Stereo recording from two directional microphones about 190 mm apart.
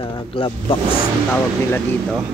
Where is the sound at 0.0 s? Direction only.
30° left (ahead or behind).